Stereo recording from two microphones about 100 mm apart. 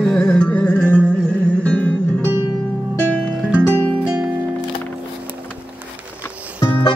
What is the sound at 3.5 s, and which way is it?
Music, 20° right (ahead or behind).